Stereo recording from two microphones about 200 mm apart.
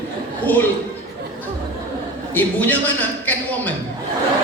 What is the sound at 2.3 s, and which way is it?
A man's voice, 10° left (ahead or behind).